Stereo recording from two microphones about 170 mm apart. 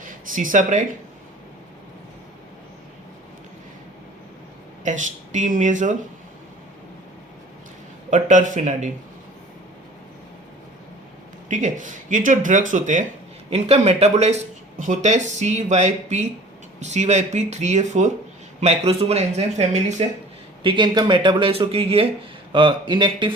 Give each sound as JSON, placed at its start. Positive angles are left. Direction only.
{"t": 0.0, "sound": "speech", "side_deg": -50}
{"t": 4.8, "sound": "speech", "side_deg": -45}
{"t": 8.1, "sound": "speech", "side_deg": -50}
{"t": 11.4, "sound": "speech", "side_deg": -45}
{"t": 20.7, "sound": "speech", "side_deg": -25}